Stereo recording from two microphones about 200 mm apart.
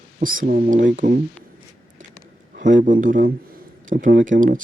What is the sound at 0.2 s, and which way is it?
Speech, 45° right (ahead or behind).